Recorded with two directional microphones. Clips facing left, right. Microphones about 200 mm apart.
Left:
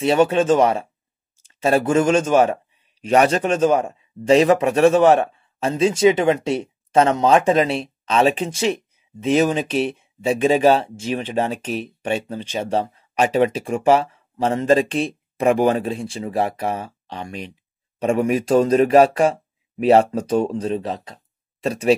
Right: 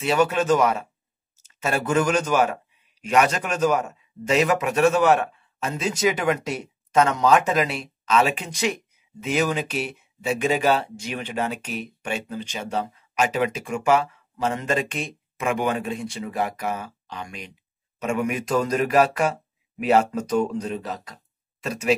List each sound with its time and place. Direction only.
0.0 s speech: 30° left (ahead or behind)